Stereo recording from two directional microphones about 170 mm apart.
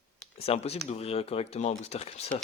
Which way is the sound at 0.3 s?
35° left (ahead or behind).